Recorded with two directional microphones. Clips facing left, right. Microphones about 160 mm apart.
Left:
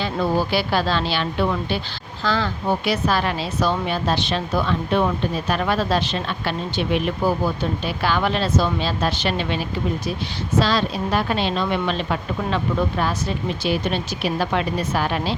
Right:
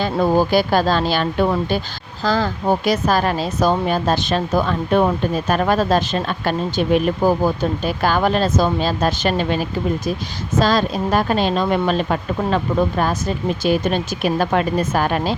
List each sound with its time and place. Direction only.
0.0 s speech: 45° right (ahead or behind)